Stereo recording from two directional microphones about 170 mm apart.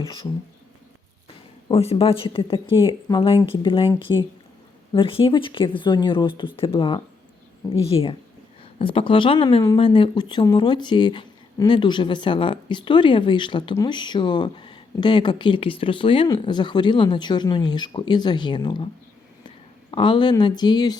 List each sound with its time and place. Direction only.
1.7 s a woman's voice: 35° left (ahead or behind)
19.9 s speech: 30° left (ahead or behind)